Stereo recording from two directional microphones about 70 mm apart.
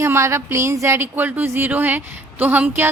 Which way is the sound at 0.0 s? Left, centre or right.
Right.